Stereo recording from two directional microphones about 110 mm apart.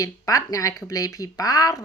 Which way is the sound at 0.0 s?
30° left (ahead or behind).